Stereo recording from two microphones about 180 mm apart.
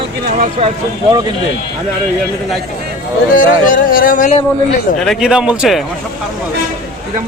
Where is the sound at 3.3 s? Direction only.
50° left (ahead or behind).